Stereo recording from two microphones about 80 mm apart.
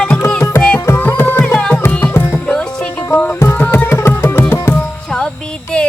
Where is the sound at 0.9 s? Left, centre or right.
Left.